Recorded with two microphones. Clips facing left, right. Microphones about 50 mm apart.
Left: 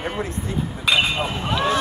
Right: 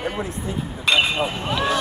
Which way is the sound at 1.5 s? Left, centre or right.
Left.